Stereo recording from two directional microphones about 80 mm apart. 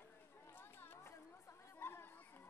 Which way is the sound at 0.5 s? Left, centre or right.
Left.